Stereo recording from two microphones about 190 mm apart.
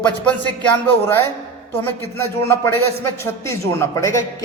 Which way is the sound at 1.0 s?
10° left (ahead or behind).